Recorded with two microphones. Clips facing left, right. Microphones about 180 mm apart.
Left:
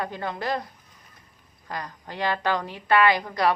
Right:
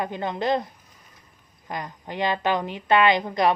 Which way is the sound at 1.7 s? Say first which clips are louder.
Right 2 dB; 20° right (ahead or behind).